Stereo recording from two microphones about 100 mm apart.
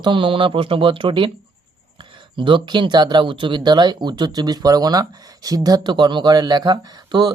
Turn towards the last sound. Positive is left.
turn(degrees=-45)  # may be behind; listen again after turning